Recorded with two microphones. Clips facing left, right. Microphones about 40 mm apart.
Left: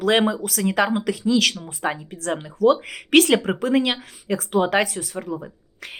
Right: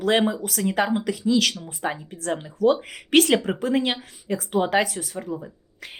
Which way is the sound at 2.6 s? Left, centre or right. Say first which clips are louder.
Left 3 dB; left.